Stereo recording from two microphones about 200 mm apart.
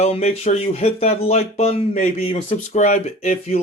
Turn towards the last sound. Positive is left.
turn(degrees=35)  # may be behind; listen again after turning